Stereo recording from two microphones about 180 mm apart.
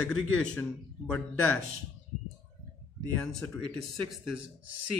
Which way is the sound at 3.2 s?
5° left (ahead or behind).